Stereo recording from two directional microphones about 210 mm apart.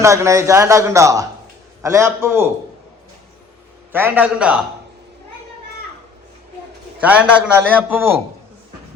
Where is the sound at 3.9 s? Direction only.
10° right (ahead or behind).